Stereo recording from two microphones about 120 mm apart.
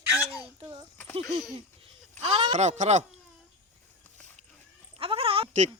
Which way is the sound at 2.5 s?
80° right.